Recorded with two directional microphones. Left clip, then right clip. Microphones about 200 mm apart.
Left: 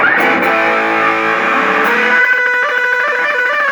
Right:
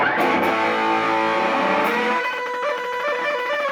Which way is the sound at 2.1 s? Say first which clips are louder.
Left 12 dB; 35° left (ahead or behind).